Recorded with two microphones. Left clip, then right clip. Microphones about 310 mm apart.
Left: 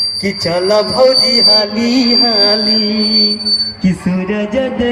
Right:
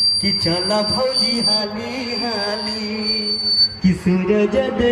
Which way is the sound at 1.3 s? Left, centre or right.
Left.